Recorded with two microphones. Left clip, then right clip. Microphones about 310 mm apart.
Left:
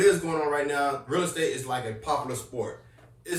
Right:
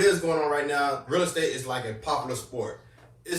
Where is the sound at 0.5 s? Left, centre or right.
Centre.